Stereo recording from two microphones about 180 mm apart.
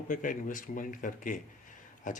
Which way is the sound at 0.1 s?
45° left (ahead or behind).